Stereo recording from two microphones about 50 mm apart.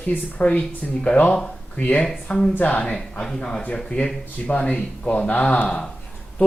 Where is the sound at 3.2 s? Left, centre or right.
Centre.